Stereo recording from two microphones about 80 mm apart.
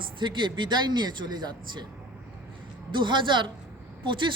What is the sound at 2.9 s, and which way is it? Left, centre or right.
Speech, right.